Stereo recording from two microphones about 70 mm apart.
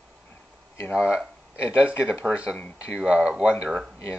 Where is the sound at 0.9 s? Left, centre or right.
Centre.